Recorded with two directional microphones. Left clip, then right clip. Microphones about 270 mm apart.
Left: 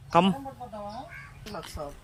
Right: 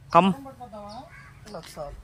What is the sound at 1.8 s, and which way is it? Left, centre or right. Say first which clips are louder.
Music: right 3 dB; right.